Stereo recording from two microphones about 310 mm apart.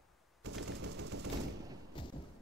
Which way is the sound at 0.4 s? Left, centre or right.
Right.